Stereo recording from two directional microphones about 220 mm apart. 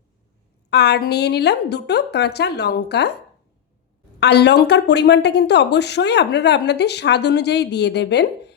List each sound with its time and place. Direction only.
0.7 s speech: 50° left (ahead or behind)
4.2 s speech: 50° left (ahead or behind)